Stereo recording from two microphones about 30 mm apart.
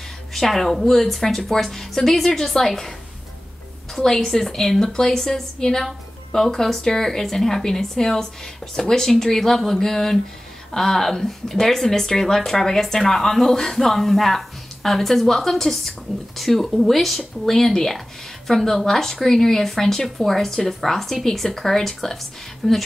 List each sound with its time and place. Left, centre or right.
0.3 s speech: centre
3.9 s speech: centre